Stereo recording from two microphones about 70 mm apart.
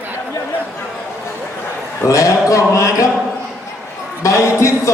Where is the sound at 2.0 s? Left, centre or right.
Left.